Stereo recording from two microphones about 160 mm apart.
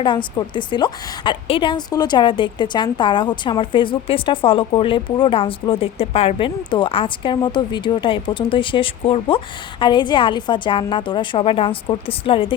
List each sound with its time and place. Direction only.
0.0 s a woman's voice: 30° left (ahead or behind)